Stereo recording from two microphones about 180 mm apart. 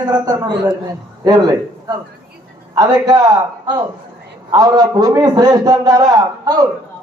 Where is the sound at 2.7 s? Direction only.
20° right (ahead or behind).